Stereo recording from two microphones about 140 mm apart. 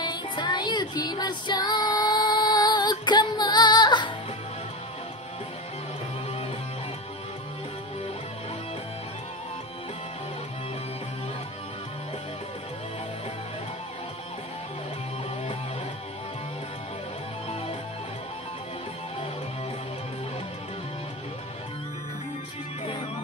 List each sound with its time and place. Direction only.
0.0 s child singing: 30° left (ahead or behind)